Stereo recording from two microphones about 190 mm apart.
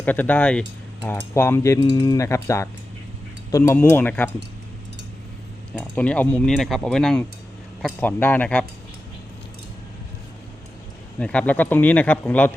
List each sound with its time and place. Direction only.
0.0 s speech: 10° left (ahead or behind)
6.0 s speech: 5° left (ahead or behind)
11.2 s speech: 5° left (ahead or behind)